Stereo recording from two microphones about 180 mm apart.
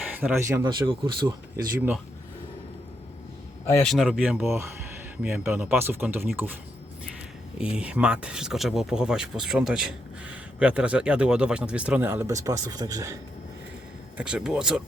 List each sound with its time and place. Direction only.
0.2 s speech: 10° right (ahead or behind)
3.8 s speech: centre (ahead or behind)
7.6 s speech: 5° right (ahead or behind)
14.2 s speech: 5° right (ahead or behind)